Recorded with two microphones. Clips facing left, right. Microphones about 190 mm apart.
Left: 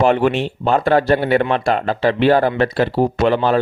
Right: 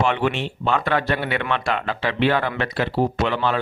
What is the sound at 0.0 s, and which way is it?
Speech, 40° left (ahead or behind).